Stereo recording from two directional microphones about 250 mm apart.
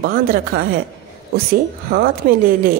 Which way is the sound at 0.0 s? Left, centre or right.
Right.